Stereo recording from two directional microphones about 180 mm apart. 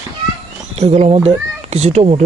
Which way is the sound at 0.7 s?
35° right (ahead or behind).